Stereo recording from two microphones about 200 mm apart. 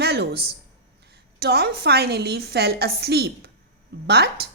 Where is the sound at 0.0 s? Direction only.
55° right (ahead or behind).